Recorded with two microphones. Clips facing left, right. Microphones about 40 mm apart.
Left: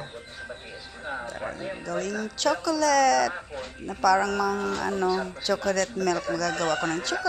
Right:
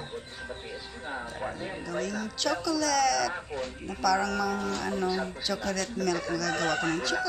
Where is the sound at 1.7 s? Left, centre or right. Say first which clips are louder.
Left 5 dB; centre.